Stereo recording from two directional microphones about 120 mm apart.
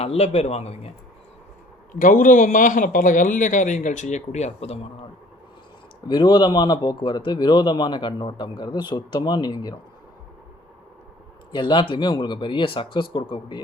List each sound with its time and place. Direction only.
0.0 s a man's voice: 60° left (ahead or behind)
2.3 s speech: 90° left; by 5.0 s 55° left (ahead or behind)
6.1 s speech: 40° left (ahead or behind)
11.5 s speech: 40° left (ahead or behind)